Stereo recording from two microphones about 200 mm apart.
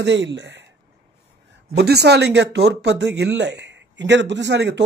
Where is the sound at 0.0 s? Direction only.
65° right (ahead or behind).